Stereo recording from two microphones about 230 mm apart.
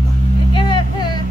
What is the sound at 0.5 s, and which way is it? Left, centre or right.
Vehicle, left.